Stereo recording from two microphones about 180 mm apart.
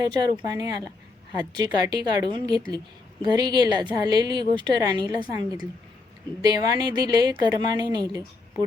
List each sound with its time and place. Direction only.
0.0 s a woman's voice: 20° right (ahead or behind)